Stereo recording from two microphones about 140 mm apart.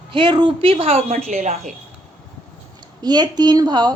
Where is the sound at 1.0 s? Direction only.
70° right (ahead or behind).